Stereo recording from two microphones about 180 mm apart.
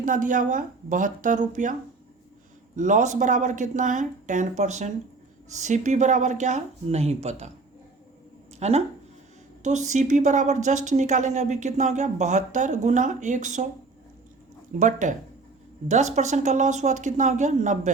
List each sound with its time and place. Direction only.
0.0 s speech: 45° right (ahead or behind)
2.7 s speech: 45° right (ahead or behind)
8.5 s speech: 35° right (ahead or behind)
14.8 s speech: 45° right (ahead or behind)